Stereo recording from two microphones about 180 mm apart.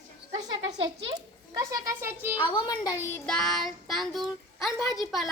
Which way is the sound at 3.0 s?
5° left (ahead or behind).